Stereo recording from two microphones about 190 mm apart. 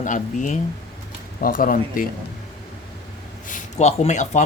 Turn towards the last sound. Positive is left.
turn(degrees=40)  # may be behind; listen again after turning